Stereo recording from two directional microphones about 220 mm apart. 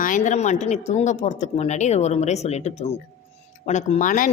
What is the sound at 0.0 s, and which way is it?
A woman's voice, 35° left (ahead or behind).